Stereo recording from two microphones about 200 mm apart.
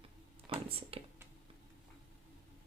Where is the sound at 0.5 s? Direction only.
30° right (ahead or behind).